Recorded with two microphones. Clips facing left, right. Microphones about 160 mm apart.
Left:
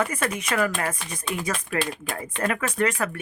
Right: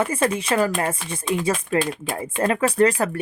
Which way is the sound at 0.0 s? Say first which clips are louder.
Right 5 dB; 30° right (ahead or behind).